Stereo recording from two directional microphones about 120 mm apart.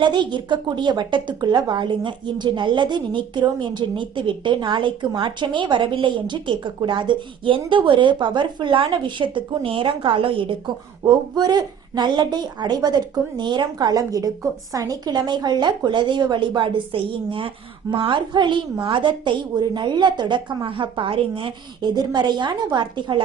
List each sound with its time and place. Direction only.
0.0 s a woman's voice: 40° right (ahead or behind)
11.0 s a woman's voice: 35° right (ahead or behind)